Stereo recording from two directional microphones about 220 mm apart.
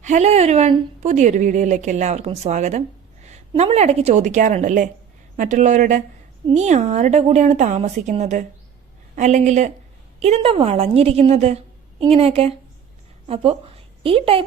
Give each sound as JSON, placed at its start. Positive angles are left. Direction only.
{"t": 0.0, "sound": "a woman's voice", "side_deg": -30}